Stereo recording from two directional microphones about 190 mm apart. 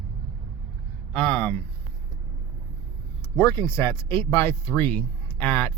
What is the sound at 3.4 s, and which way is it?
Speech, 15° left (ahead or behind).